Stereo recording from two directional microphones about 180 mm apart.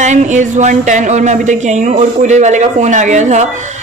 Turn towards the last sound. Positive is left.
turn(degrees=-40)  # may be behind; listen again after turning